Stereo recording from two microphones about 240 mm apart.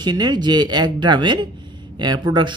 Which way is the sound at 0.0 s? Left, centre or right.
Centre.